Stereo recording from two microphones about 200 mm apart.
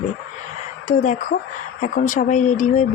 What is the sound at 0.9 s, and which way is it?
Speech, 40° left (ahead or behind).